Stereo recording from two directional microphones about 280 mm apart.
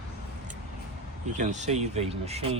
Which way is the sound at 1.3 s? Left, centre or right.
Right.